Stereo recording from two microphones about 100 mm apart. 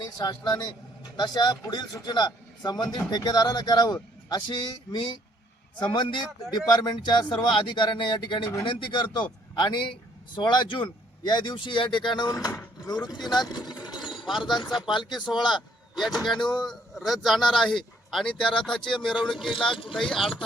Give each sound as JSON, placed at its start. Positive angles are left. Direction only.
{"t": 0.2, "sound": "a man's voice", "side_deg": 40}
{"t": 12.3, "sound": "a man's voice", "side_deg": 35}
{"t": 16.0, "sound": "a man's voice", "side_deg": 0}
{"t": 16.4, "sound": "speech", "side_deg": 50}
{"t": 17.1, "sound": "a man's voice", "side_deg": 0}